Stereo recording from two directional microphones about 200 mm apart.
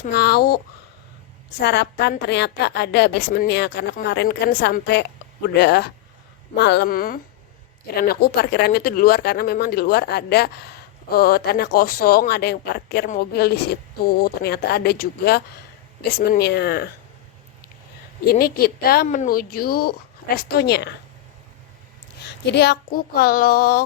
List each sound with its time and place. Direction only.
0.1 s speech: 55° left (ahead or behind)
1.6 s a woman's voice: 55° left (ahead or behind)
18.3 s speech: 50° left (ahead or behind)
22.2 s speech: 55° left (ahead or behind)